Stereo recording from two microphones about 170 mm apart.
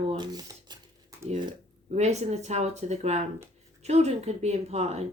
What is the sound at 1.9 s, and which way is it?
A woman's voice, 40° right (ahead or behind).